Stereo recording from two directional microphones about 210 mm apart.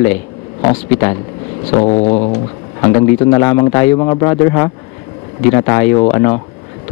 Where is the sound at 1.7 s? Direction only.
30° left (ahead or behind).